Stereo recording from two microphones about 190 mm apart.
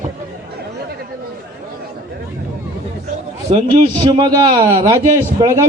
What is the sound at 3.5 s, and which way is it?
A man's voice, 25° right (ahead or behind).